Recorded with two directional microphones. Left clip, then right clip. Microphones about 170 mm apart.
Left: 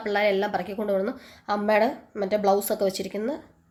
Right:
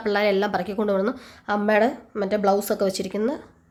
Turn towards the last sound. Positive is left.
turn(degrees=-25)  # may be behind; listen again after turning